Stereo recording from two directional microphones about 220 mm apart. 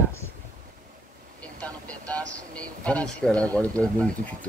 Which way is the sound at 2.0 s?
5° left (ahead or behind).